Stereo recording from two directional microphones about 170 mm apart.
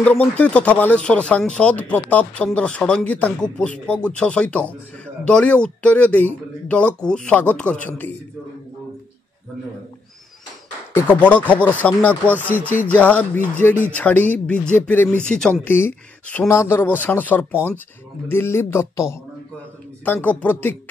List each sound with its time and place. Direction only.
0.0 s speech: 10° left (ahead or behind)
10.9 s speech: 10° left (ahead or behind)
12.4 s speech: 10° right (ahead or behind)
12.9 s speech: 10° left (ahead or behind)